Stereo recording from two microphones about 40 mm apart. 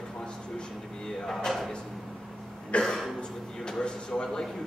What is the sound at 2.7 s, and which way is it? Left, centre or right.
Speech, left.